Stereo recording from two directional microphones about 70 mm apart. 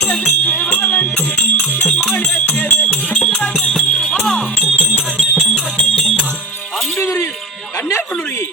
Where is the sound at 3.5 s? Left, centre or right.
Centre.